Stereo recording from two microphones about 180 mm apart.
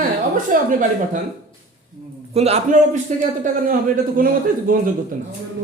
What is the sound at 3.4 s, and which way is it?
Speech, 45° right (ahead or behind).